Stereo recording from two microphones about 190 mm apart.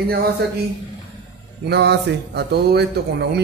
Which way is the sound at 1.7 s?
60° right (ahead or behind).